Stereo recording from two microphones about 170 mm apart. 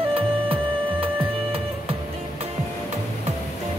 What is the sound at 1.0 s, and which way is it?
Music, 30° right (ahead or behind).